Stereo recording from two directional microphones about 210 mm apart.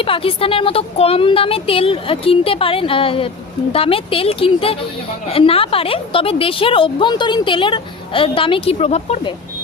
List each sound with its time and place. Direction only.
0.0 s a woman's voice: 25° left (ahead or behind)